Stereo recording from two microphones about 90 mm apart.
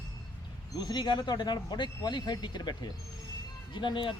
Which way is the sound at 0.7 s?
55° left (ahead or behind).